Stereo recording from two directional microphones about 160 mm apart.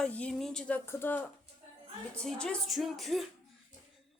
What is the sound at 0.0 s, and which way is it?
A woman's voice, 5° left (ahead or behind).